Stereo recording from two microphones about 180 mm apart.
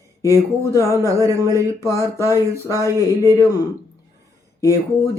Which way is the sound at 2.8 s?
15° left (ahead or behind).